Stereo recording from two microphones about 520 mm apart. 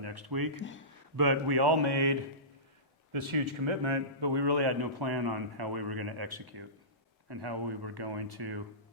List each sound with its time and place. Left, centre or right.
0.0 s speech: right
0.5 s speech: left
1.1 s a man's voice: right
3.1 s a man's voice: right